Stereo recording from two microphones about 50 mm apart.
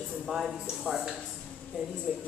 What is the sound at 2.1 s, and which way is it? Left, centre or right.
Speech, centre.